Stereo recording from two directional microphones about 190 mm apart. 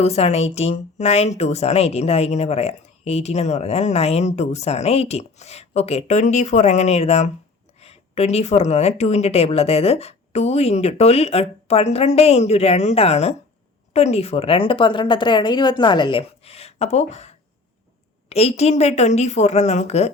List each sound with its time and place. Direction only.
0.0 s a woman's voice: 35° left (ahead or behind)